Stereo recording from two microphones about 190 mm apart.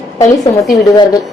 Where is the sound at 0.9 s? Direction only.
20° left (ahead or behind).